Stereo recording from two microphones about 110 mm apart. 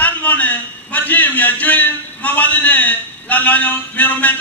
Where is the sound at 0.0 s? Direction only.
15° left (ahead or behind).